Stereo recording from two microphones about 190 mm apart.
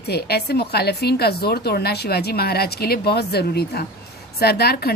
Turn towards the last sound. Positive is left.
turn(degrees=55)  # may be behind; listen again after turning